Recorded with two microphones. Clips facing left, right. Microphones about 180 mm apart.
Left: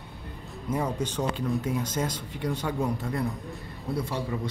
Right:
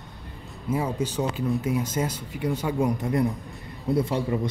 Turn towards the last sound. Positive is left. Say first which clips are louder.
# right 7 dB
turn(degrees=-25)  # may be behind; listen again after turning